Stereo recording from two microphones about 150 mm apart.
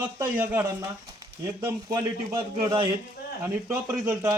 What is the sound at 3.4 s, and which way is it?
Speech, 15° right (ahead or behind).